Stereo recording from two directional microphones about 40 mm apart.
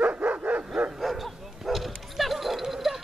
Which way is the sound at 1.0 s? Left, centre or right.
Centre.